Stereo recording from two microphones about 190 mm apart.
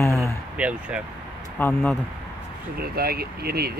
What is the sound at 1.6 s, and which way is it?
Speech, 10° left (ahead or behind).